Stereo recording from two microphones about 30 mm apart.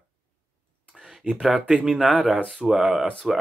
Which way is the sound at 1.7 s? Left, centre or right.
Right.